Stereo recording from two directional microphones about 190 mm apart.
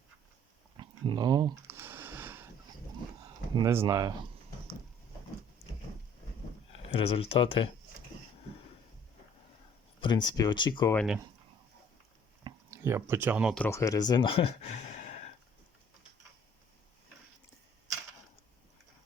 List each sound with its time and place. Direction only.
0.8 s a sound: 25° right (ahead or behind)
3.5 s speech: 15° right (ahead or behind)
6.8 s speech: 30° left (ahead or behind)
10.0 s speech: 25° left (ahead or behind)
10.9 s speech: centre (ahead or behind)
12.7 s speech: 15° right (ahead or behind)
13.7 s speech: 15° left (ahead or behind); by 15.3 s 40° left (ahead or behind)